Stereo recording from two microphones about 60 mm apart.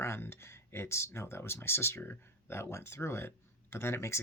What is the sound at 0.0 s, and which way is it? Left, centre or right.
Speech, left.